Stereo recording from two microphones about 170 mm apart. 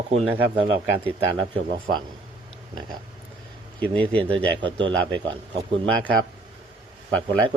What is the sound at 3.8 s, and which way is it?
Speech, 10° left (ahead or behind).